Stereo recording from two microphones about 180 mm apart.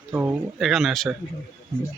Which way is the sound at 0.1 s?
10° right (ahead or behind).